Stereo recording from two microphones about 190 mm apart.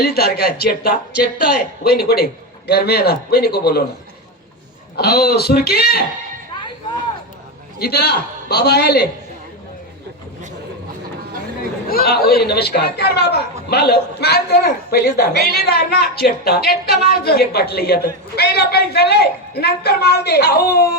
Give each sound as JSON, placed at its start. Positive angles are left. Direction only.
{"t": 0.0, "sound": "a man's voice", "side_deg": 55}
{"t": 4.9, "sound": "a man's voice", "side_deg": 55}
{"t": 7.8, "sound": "a man's voice", "side_deg": 55}
{"t": 11.9, "sound": "a man's voice", "side_deg": 55}